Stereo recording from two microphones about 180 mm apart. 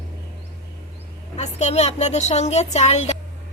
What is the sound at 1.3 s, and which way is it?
A woman's voice, 35° left (ahead or behind).